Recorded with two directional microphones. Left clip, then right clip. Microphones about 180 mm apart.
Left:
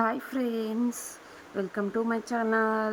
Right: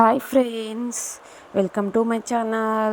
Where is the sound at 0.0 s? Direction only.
15° right (ahead or behind).